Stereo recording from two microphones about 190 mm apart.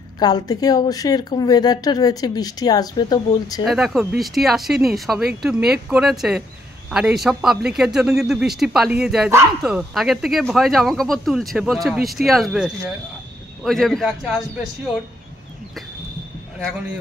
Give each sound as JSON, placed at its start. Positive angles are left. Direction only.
{"t": 0.2, "sound": "speech", "side_deg": 20}
{"t": 3.6, "sound": "speech", "side_deg": 0}